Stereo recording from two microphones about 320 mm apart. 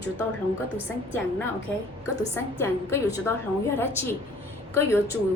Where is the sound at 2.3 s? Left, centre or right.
Centre.